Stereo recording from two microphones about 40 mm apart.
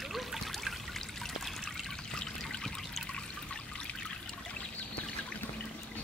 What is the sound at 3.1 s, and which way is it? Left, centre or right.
Trickle, left.